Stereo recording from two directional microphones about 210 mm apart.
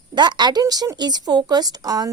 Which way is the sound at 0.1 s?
20° right (ahead or behind).